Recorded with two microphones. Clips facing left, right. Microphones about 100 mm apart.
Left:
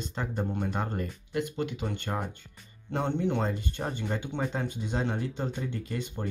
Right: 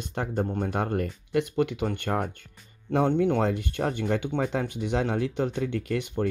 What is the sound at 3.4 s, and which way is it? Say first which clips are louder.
Speech: right 5 dB; 70° right (ahead or behind).